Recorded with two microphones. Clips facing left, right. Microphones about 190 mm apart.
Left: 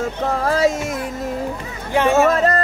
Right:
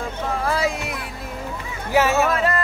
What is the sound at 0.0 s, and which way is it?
Music, 40° left (ahead or behind).